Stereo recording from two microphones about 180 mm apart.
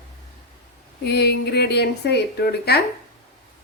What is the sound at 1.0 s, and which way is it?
Speech, 65° left (ahead or behind).